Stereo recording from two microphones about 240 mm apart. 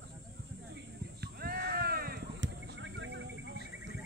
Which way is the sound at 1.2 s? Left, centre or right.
Right.